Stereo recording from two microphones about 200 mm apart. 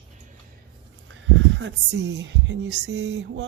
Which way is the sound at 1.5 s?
65° right (ahead or behind).